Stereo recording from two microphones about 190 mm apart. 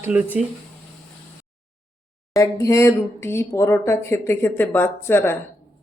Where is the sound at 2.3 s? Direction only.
15° left (ahead or behind).